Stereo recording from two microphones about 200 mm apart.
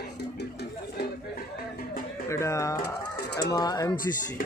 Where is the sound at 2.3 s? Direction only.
15° left (ahead or behind).